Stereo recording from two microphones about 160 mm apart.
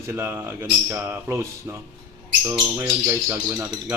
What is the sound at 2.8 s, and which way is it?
Speech, 15° right (ahead or behind).